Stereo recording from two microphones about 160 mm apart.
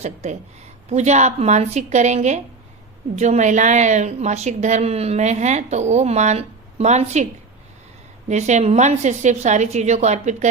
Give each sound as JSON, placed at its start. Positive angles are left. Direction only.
{"t": 0.0, "sound": "a woman's voice", "side_deg": -45}
{"t": 8.3, "sound": "a woman's voice", "side_deg": -45}